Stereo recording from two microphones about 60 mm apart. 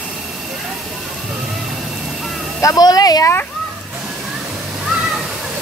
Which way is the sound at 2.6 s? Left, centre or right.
Left.